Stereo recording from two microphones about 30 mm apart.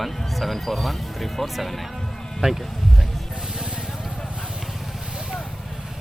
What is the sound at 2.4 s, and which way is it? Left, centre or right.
Speech, right.